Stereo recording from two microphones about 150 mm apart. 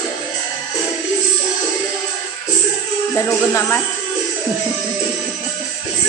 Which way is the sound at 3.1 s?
20° left (ahead or behind).